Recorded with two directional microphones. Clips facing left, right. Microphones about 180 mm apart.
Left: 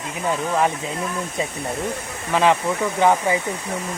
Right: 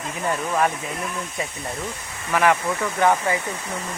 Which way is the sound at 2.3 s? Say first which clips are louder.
Left 2 dB; 20° left (ahead or behind).